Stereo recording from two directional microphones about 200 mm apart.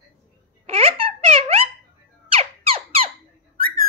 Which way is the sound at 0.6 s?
30° right (ahead or behind).